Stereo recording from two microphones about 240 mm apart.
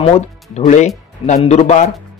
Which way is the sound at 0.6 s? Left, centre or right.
Left.